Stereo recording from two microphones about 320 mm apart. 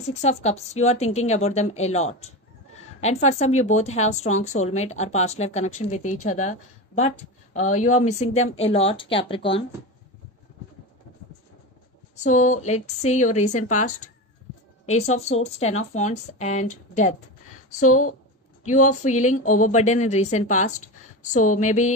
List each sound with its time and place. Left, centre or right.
0.1 s a woman's voice: left
12.2 s a woman's voice: left
18.7 s a woman's voice: left